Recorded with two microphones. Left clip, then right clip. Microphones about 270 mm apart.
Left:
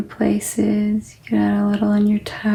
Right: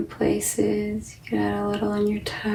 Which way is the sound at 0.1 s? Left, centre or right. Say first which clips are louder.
Left 4 dB; left.